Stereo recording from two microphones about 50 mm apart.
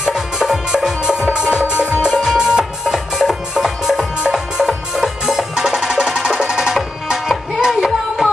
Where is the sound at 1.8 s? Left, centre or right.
Right.